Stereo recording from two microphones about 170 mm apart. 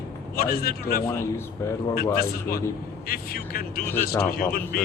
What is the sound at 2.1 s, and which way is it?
Speech, 60° left (ahead or behind).